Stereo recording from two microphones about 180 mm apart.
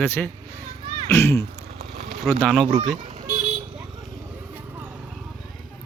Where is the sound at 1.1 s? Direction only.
15° left (ahead or behind).